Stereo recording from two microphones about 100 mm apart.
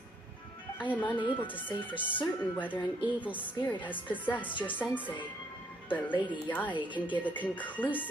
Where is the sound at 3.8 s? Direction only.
15° left (ahead or behind).